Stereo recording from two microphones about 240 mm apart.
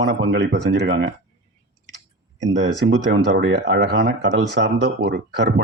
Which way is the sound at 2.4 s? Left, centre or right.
Right.